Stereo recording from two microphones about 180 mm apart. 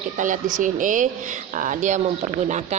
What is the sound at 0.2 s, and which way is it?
A woman's voice, 45° right (ahead or behind).